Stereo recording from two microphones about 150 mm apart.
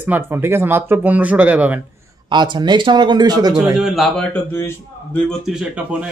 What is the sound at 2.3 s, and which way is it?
Speech, 30° right (ahead or behind).